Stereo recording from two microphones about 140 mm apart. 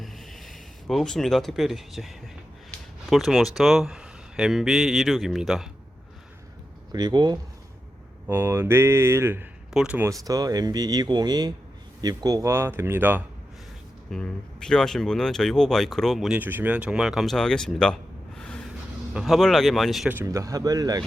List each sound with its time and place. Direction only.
0.0 s speech: centre (ahead or behind)
6.9 s speech: 30° right (ahead or behind)
8.3 s speech: 15° right (ahead or behind)
10.0 s speech: 25° right (ahead or behind)
14.1 s speech: 5° left (ahead or behind)
16.4 s speech: 15° right (ahead or behind); by 17.9 s 5° left (ahead or behind)
18.3 s a sound: 5° left (ahead or behind)
19.1 s speech: centre (ahead or behind)
20.1 s speech: 20° right (ahead or behind)